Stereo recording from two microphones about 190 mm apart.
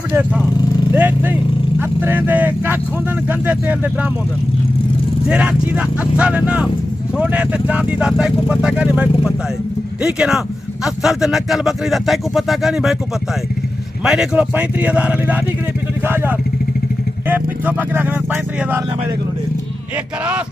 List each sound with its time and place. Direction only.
0.1 s speech: 10° right (ahead or behind)
5.3 s speech: 5° right (ahead or behind)
14.0 s speech: 5° right (ahead or behind)
17.3 s speech: 10° right (ahead or behind)